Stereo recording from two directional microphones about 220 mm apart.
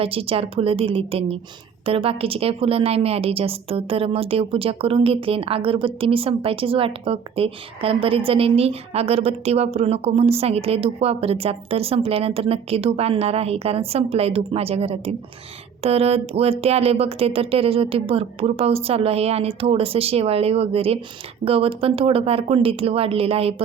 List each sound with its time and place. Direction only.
0.0 s a woman's voice: 25° right (ahead or behind)